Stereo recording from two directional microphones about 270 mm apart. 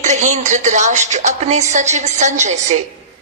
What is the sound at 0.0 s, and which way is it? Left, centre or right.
Speech, right.